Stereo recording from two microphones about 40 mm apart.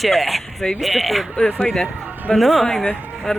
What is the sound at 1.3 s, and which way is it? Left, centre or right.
Speech, left.